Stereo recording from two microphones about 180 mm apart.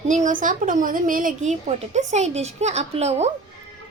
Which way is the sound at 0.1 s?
45° right (ahead or behind).